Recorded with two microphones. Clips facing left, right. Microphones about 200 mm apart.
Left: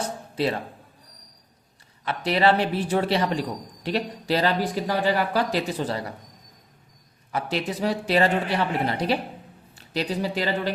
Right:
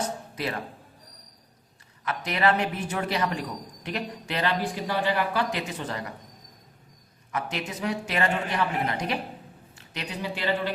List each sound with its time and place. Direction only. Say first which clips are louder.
0.0 s music: left 5 dB; 30° left (ahead or behind)
2.0 s speech: left 4 dB; 30° left (ahead or behind)
7.3 s speech: left 5 dB; 30° left (ahead or behind)